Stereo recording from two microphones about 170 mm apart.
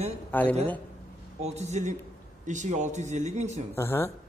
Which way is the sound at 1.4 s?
40° right (ahead or behind).